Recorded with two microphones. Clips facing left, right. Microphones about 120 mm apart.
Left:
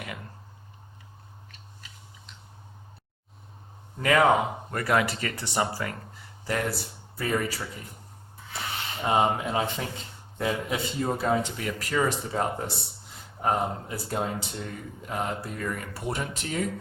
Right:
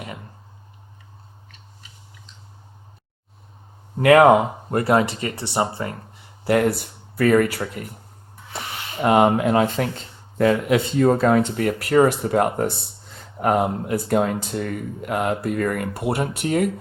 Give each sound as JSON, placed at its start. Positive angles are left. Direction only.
{"t": 4.0, "sound": "speech", "side_deg": -60}
{"t": 4.7, "sound": "speech", "side_deg": -30}
{"t": 5.8, "sound": "a sound", "side_deg": -30}
{"t": 6.5, "sound": "speech", "side_deg": -60}
{"t": 7.2, "sound": "speech", "side_deg": -75}
{"t": 8.5, "sound": "speech", "side_deg": -85}
{"t": 11.5, "sound": "speech", "side_deg": -55}